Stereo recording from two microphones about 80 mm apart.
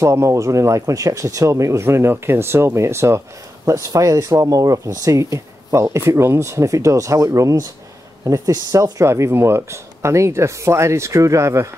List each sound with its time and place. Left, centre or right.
0.0 s speech: right